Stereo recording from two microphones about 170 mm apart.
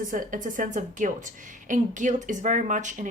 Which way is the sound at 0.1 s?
50° right (ahead or behind).